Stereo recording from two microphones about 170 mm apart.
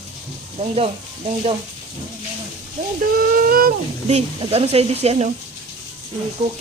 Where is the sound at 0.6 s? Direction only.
35° right (ahead or behind).